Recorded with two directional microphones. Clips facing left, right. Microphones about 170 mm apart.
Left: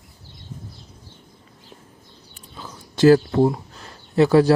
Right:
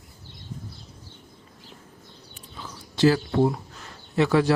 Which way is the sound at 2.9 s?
45° left (ahead or behind).